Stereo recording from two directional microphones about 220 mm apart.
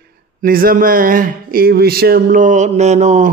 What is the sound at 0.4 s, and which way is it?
Speech, 40° right (ahead or behind).